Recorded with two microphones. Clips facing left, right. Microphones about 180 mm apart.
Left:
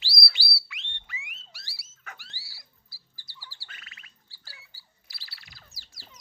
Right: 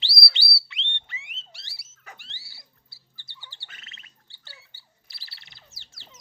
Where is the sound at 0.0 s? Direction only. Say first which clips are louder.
Right 2 dB; 25° right (ahead or behind).